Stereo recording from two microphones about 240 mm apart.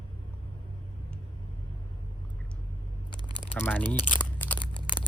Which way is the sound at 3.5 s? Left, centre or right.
Centre.